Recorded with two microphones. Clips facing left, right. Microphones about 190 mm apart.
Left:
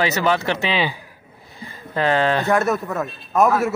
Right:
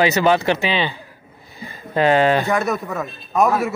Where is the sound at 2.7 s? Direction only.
5° left (ahead or behind).